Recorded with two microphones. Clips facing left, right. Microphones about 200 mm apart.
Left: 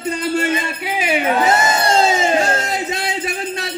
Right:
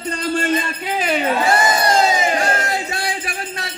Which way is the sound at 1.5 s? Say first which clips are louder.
Even; 25° left (ahead or behind).